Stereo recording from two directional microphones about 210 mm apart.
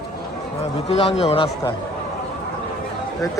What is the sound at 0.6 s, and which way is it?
Speech, 30° left (ahead or behind).